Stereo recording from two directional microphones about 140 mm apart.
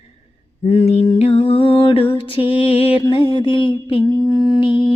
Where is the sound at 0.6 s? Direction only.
45° left (ahead or behind).